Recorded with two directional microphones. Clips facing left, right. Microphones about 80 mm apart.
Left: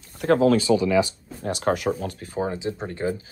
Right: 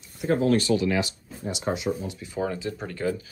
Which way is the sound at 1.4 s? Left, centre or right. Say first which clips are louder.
Left 5 dB; left.